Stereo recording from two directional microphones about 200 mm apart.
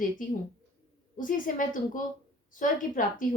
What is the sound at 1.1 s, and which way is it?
A woman's voice, 40° left (ahead or behind).